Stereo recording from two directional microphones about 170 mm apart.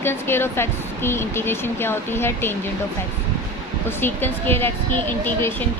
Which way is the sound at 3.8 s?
10° left (ahead or behind).